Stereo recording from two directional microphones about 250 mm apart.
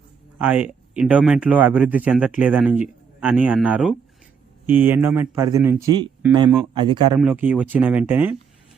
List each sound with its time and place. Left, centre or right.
0.3 s speech: centre
7.2 s speech: centre